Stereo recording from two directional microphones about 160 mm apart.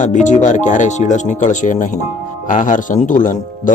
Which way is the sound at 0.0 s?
50° left (ahead or behind).